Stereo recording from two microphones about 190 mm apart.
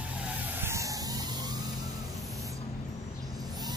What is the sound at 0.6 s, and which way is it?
Emergency vehicle, 15° right (ahead or behind).